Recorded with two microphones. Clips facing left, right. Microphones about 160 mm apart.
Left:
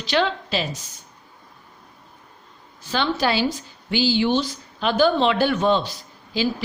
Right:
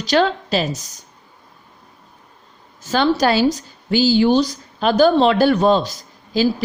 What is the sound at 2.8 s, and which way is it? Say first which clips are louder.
A woman's voice: right 6 dB; 40° right (ahead or behind).